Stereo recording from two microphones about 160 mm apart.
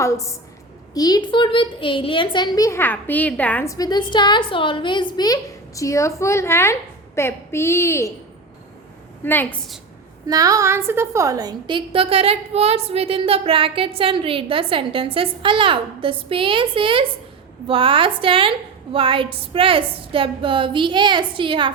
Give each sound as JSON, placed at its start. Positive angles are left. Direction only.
{"t": 0.0, "sound": "a woman's voice", "side_deg": 20}
{"t": 9.2, "sound": "a woman's voice", "side_deg": 10}
{"t": 10.2, "sound": "a woman's voice", "side_deg": -20}